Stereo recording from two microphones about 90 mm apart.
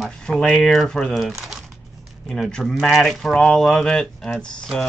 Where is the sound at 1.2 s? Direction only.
5° right (ahead or behind).